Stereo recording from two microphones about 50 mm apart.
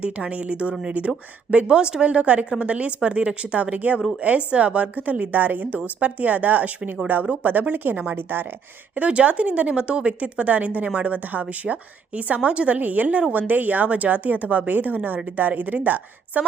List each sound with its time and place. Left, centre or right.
0.0 s a woman's voice: right
9.0 s a woman's voice: right